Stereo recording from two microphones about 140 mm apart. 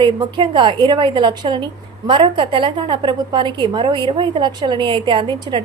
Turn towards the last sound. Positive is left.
turn(degrees=-35)  # may be behind; listen again after turning